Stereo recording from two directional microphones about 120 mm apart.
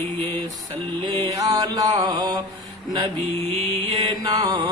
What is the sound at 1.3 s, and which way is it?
Mantra, 35° right (ahead or behind).